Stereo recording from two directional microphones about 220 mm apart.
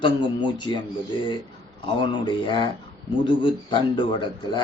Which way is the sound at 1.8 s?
20° left (ahead or behind).